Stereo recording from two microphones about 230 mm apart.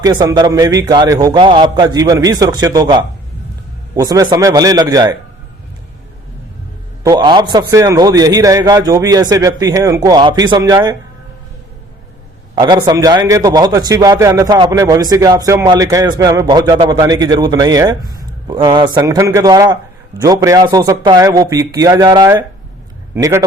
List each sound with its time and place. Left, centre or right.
0.0 s a man's voice: centre
7.0 s a man's voice: centre
12.5 s a man's voice: centre